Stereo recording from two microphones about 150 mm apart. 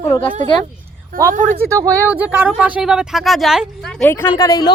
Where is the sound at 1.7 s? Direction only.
20° right (ahead or behind).